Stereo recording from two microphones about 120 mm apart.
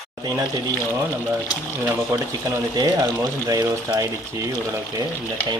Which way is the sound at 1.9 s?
25° right (ahead or behind).